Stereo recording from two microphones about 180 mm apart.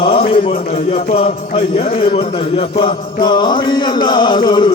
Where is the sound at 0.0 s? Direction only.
30° left (ahead or behind).